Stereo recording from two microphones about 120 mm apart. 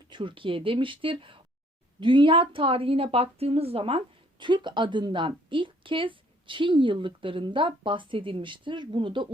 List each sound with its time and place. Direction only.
0.1 s a woman's voice: 40° right (ahead or behind)